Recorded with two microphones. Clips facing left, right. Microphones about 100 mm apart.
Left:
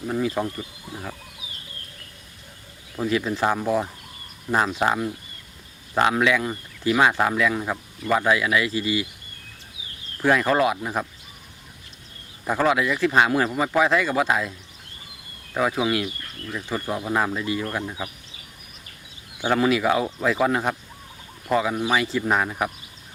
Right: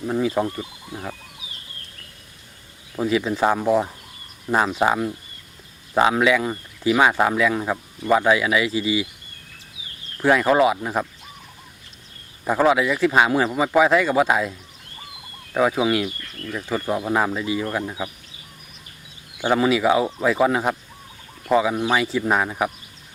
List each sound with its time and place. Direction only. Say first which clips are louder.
0.4 s speech: right 4 dB; 15° right (ahead or behind)
2.9 s speech: right 2 dB; 10° right (ahead or behind)
10.2 s speech: right 3 dB; 10° right (ahead or behind)
12.5 s speech: right 3 dB; 10° right (ahead or behind)
15.5 s speech: right 3 dB; 10° right (ahead or behind)
16.6 s speech: right 4 dB; 15° right (ahead or behind)
19.5 s speech: right 2 dB; 5° right (ahead or behind)